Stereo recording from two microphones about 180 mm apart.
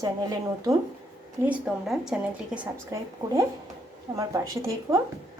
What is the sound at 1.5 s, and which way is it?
A woman's voice, 5° right (ahead or behind).